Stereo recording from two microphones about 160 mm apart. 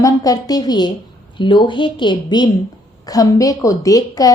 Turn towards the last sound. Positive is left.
turn(degrees=20)  # may be behind; listen again after turning